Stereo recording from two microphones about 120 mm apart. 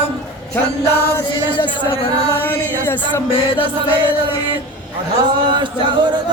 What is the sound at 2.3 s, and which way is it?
Chant, 15° left (ahead or behind).